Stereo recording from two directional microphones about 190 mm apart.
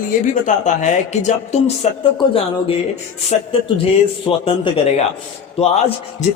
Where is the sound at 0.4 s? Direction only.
40° left (ahead or behind).